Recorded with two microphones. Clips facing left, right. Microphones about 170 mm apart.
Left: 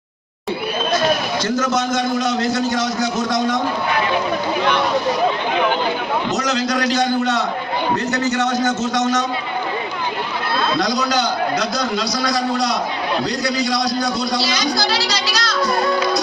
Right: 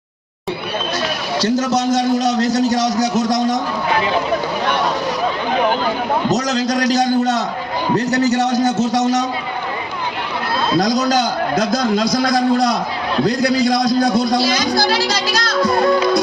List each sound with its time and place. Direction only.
1.4 s a man's voice: 35° right (ahead or behind)
6.2 s a man's voice: 40° right (ahead or behind)
10.8 s a man's voice: 45° right (ahead or behind)